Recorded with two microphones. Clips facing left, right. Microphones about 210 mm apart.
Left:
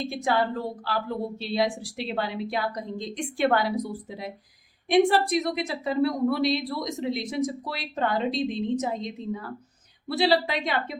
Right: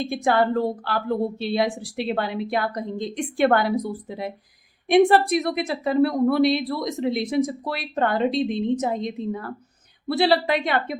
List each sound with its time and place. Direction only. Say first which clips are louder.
0.1 s a woman's voice: right 7 dB; 60° right (ahead or behind)